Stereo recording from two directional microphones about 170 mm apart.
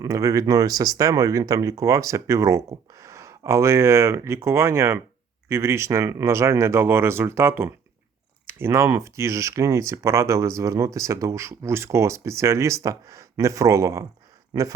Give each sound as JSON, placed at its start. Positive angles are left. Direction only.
{"t": 0.0, "sound": "speech", "side_deg": -20}